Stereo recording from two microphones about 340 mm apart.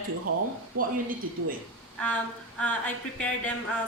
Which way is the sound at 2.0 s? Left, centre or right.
Centre.